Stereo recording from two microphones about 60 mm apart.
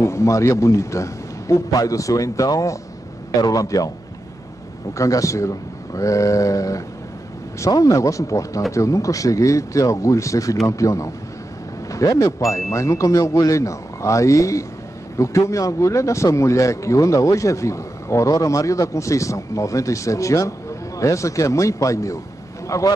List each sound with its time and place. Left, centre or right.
0.0 s a man's voice: left
4.9 s speech: left